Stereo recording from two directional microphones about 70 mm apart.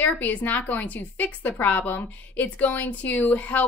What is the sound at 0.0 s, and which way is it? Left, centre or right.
A woman's voice, left.